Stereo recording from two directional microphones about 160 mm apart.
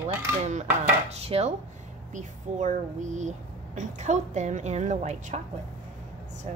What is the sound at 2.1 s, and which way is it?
Speech, 50° right (ahead or behind).